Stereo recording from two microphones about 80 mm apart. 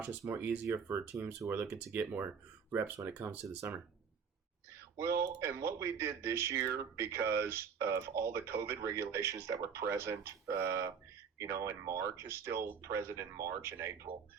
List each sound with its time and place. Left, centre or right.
0.3 s speech: right
4.9 s speech: right